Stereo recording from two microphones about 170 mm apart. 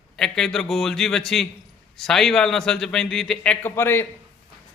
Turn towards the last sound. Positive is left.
turn(degrees=15)  # may be behind; listen again after turning